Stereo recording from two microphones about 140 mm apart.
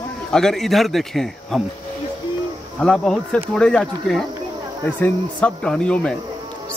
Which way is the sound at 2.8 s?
5° left (ahead or behind).